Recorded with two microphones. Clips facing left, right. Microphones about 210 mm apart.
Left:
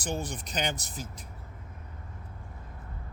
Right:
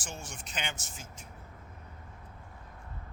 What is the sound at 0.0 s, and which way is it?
Speech, 35° left (ahead or behind).